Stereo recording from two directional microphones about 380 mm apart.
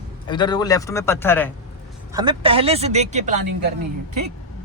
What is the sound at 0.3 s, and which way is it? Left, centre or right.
A man's voice, centre.